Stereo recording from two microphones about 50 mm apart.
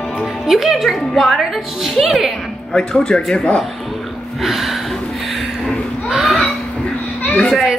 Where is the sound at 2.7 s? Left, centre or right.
Centre.